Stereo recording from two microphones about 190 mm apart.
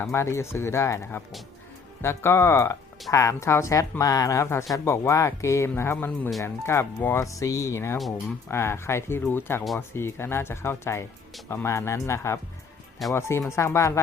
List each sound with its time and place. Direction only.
0.0 s speech: 15° left (ahead or behind)